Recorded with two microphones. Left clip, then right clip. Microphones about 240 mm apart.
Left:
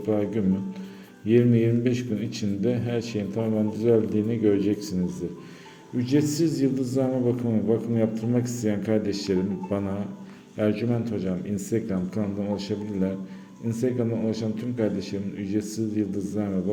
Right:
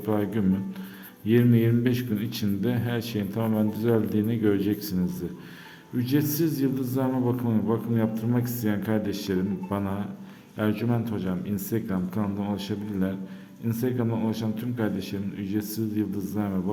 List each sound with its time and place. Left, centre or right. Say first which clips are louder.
0.1 s a man's voice: left 1 dB; centre